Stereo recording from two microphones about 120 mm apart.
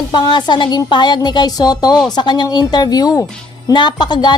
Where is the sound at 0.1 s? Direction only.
40° left (ahead or behind).